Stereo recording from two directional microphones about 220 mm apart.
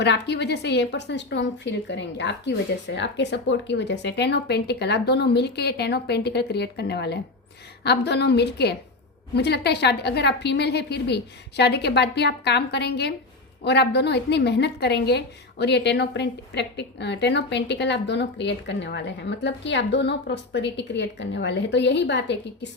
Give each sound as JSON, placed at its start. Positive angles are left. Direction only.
{"t": 0.0, "sound": "a woman's voice", "side_deg": 50}